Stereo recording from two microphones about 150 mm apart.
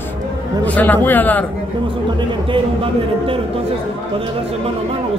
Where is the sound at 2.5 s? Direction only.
40° right (ahead or behind).